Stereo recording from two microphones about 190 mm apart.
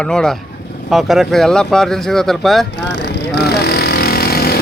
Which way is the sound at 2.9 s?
65° left (ahead or behind).